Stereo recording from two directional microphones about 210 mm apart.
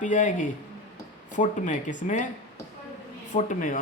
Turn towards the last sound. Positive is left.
turn(degrees=40)  # may be behind; listen again after turning